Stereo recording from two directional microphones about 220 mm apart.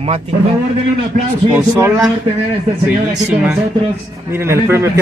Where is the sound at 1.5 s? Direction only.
10° right (ahead or behind).